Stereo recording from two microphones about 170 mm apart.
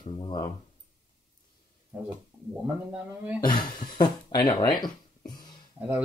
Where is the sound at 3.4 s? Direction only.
25° left (ahead or behind).